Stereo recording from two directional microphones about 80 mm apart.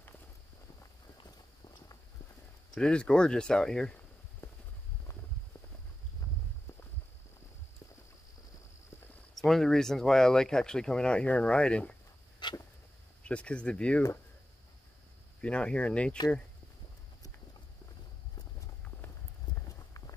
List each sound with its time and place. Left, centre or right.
1.2 s walk: left
2.7 s speech: centre
4.4 s clip-clop: left
9.3 s speech: centre
12.4 s a sound: left
13.2 s speech: centre
15.4 s speech: centre